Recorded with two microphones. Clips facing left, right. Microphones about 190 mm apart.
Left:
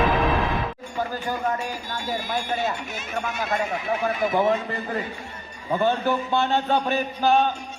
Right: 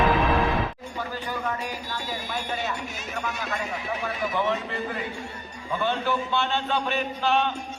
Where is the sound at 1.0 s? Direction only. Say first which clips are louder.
Left 5 dB; 40° left (ahead or behind).